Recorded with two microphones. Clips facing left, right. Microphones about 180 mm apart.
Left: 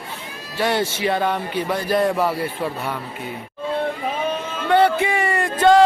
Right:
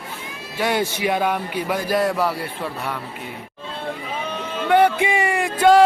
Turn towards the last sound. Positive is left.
turn(degrees=-5)  # may be behind; listen again after turning